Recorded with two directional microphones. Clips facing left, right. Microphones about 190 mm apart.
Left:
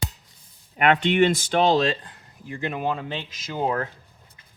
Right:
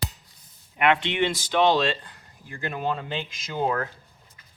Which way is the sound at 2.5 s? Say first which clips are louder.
Left 2 dB; 15° left (ahead or behind).